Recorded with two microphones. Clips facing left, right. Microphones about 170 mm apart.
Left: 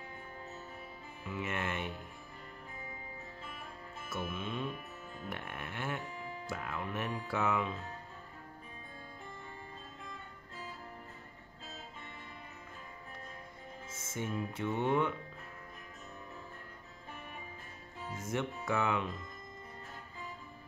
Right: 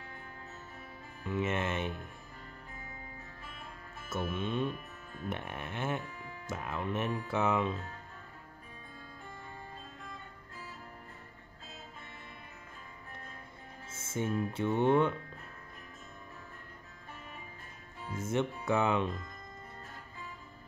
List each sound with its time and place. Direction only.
1.2 s music: 25° right (ahead or behind)
4.1 s speech: 25° right (ahead or behind)
5.3 s music: 25° right (ahead or behind)
6.4 s speech: 20° right (ahead or behind)
13.9 s speech: 30° right (ahead or behind)
18.1 s speech: 25° right (ahead or behind)